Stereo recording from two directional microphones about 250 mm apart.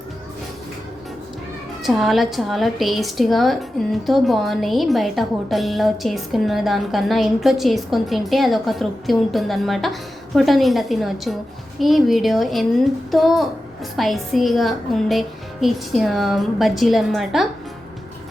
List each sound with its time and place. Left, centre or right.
1.8 s a woman's voice: centre